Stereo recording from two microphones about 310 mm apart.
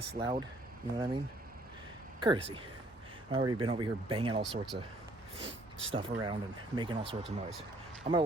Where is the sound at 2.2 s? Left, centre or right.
Centre.